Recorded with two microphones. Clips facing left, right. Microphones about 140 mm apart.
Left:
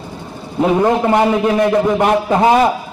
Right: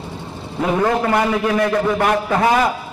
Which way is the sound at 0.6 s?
25° left (ahead or behind).